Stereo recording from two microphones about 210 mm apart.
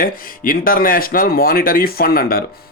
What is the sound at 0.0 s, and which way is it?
Speech, 45° left (ahead or behind).